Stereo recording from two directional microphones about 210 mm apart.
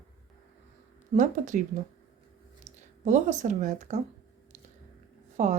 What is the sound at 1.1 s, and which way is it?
Speech, 35° right (ahead or behind).